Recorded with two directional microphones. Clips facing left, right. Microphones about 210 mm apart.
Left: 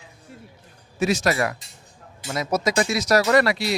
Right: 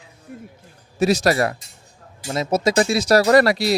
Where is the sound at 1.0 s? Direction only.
35° right (ahead or behind).